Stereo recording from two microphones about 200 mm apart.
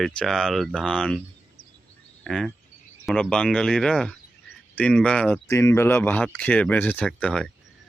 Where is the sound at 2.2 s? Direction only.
Centre (ahead or behind).